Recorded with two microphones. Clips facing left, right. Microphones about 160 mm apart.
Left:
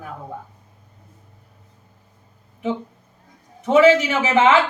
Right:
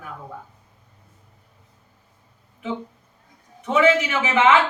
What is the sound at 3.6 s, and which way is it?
Speech, 35° left (ahead or behind).